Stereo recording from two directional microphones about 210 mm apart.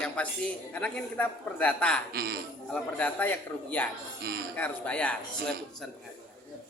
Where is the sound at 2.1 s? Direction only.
50° right (ahead or behind).